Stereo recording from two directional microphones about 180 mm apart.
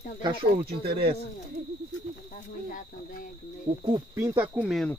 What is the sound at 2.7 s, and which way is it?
Speech, 45° left (ahead or behind).